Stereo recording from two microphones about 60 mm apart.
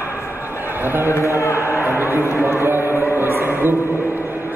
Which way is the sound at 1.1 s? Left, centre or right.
Left.